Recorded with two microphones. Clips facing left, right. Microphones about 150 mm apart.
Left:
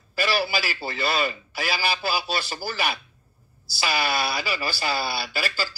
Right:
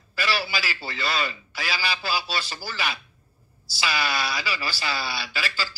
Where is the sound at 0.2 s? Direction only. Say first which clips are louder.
Left 3 dB; 45° left (ahead or behind).